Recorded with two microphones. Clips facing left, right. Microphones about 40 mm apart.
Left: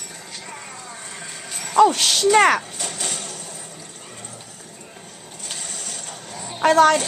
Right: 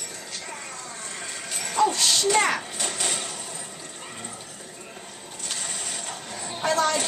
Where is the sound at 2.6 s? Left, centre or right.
Centre.